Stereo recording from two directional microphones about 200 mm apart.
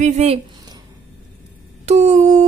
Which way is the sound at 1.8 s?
35° right (ahead or behind).